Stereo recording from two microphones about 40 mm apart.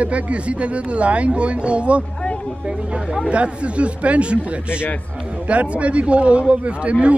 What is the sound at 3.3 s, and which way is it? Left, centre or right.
A man's voice, right.